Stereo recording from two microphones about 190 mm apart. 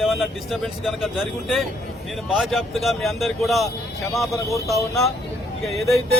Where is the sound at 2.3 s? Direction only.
Centre (ahead or behind).